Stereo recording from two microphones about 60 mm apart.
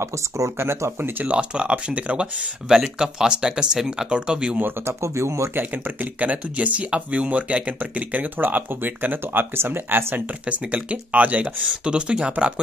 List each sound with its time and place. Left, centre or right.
0.0 s speech: right
1.2 s speech: centre
2.7 s speech: centre
4.6 s speech: right
5.0 s speech: right
6.1 s speech: right
10.4 s speech: right